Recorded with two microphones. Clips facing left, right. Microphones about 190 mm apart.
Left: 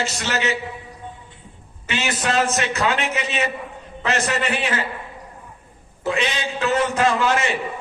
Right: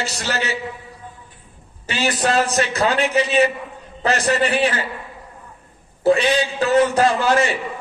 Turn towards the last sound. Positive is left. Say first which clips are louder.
# right 3 dB
turn(degrees=-35)  # may be behind; listen again after turning